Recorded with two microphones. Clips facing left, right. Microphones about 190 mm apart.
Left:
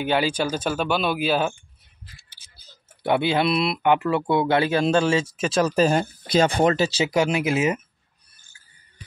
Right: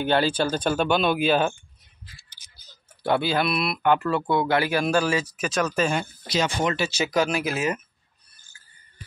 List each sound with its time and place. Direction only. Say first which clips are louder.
0.0 s speech: even; 10° left (ahead or behind)
2.5 s speech: left 2 dB; 20° left (ahead or behind); by 6.6 s 50° left (ahead or behind)
6.6 s speech: left 5 dB; 35° left (ahead or behind)